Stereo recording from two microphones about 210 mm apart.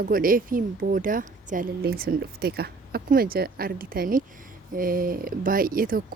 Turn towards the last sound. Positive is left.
turn(degrees=-45)  # may be behind; listen again after turning